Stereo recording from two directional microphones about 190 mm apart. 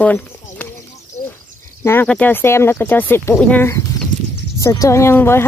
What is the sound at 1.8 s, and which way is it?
A woman's voice, 10° left (ahead or behind).